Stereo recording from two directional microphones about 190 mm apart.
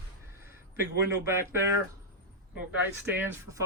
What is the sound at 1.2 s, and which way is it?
Speech, 15° right (ahead or behind).